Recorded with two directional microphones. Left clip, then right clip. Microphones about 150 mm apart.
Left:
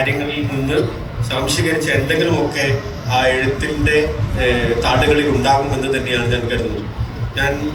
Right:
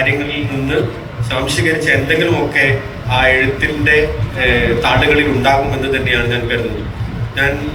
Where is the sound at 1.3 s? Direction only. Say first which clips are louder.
Right 3 dB; 35° left (ahead or behind).